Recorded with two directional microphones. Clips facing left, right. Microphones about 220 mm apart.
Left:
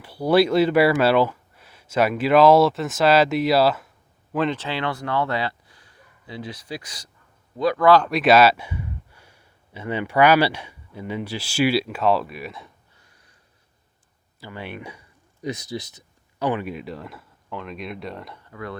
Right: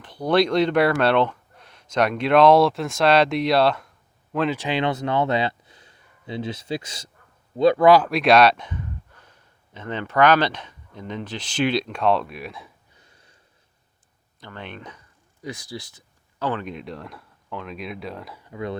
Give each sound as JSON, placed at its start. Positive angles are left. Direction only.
{"t": 0.0, "sound": "speech", "side_deg": 10}
{"t": 4.5, "sound": "speech", "side_deg": -15}
{"t": 7.9, "sound": "speech", "side_deg": 0}
{"t": 13.0, "sound": "snort", "side_deg": -25}
{"t": 14.4, "sound": "speech", "side_deg": 10}
{"t": 15.4, "sound": "speech", "side_deg": 20}
{"t": 18.4, "sound": "speech", "side_deg": -20}